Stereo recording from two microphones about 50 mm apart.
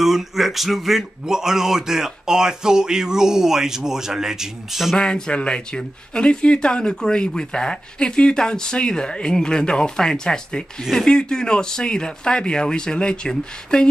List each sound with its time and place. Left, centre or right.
0.0 s speech: centre
4.9 s speech: centre